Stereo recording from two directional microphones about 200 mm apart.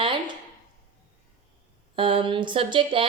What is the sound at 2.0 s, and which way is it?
A woman's voice, 25° right (ahead or behind).